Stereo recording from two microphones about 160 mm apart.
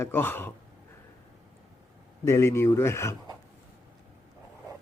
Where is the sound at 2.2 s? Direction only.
15° left (ahead or behind).